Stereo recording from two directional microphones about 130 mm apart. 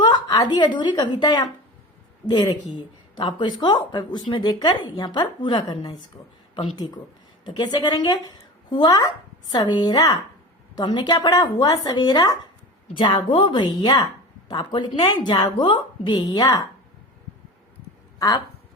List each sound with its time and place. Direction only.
0.0 s a woman's voice: 30° left (ahead or behind)
6.1 s speech: 20° left (ahead or behind)
6.5 s speech: 35° left (ahead or behind)
18.2 s speech: 30° left (ahead or behind)